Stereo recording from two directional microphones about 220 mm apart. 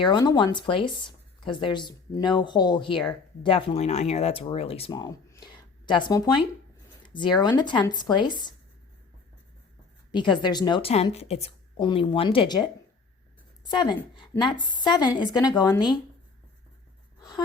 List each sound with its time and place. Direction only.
0.0 s a woman's voice: 20° left (ahead or behind)
10.1 s a woman's voice: 20° left (ahead or behind)
13.7 s a woman's voice: 20° left (ahead or behind)
17.2 s a sound: 20° left (ahead or behind)